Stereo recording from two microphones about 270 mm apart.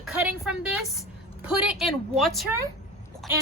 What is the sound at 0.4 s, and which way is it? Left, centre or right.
A woman's voice, centre.